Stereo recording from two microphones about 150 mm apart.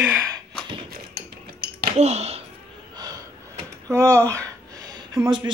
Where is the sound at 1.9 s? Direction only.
45° right (ahead or behind).